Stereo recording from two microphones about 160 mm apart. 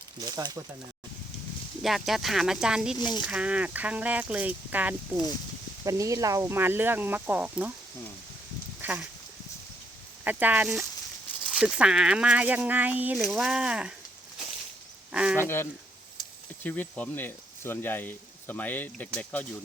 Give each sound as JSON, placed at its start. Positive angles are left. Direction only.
{"t": 0.3, "sound": "speech", "side_deg": -25}
{"t": 1.8, "sound": "speech", "side_deg": 0}
{"t": 3.0, "sound": "speech", "side_deg": 25}
{"t": 3.2, "sound": "speech", "side_deg": -5}
{"t": 5.8, "sound": "speech", "side_deg": -20}
{"t": 8.8, "sound": "a sound", "side_deg": -10}
{"t": 10.2, "sound": "speech", "side_deg": -10}
{"t": 15.1, "sound": "a sound", "side_deg": -5}
{"t": 15.4, "sound": "speech", "side_deg": 15}
{"t": 16.2, "sound": "a sound", "side_deg": 30}
{"t": 16.6, "sound": "speech", "side_deg": 10}